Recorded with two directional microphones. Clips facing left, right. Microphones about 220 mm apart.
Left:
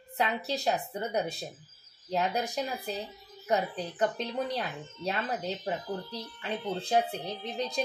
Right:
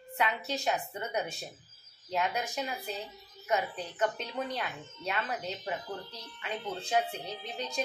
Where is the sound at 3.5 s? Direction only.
35° left (ahead or behind).